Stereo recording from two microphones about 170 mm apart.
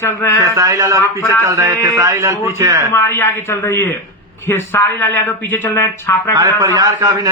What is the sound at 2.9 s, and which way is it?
A man's voice, 15° left (ahead or behind).